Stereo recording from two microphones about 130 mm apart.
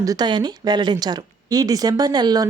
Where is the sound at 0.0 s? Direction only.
30° right (ahead or behind).